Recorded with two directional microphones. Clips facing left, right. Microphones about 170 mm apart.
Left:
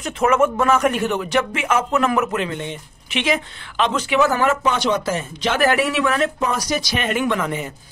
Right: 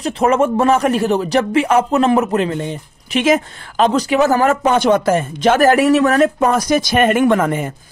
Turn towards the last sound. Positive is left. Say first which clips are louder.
# right 7 dB
turn(degrees=-50)  # may be behind; listen again after turning